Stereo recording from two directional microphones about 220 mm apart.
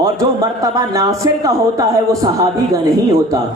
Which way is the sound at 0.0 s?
15° right (ahead or behind).